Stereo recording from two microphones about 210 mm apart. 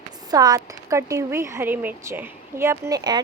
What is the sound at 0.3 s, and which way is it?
Speech, 15° right (ahead or behind).